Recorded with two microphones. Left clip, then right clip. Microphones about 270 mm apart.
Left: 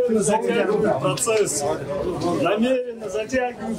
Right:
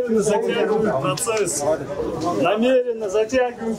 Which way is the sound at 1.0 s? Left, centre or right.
Centre.